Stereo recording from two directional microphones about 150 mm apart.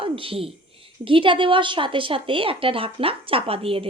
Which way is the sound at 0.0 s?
40° right (ahead or behind).